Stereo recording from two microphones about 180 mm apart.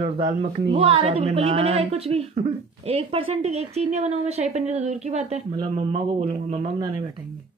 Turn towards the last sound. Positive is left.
turn(degrees=-30)  # may be behind; listen again after turning